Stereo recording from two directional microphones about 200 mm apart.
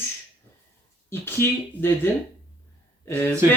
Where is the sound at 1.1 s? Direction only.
10° left (ahead or behind).